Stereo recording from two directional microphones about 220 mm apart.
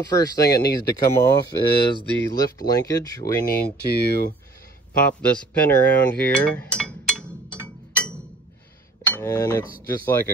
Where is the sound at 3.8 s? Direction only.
45° left (ahead or behind).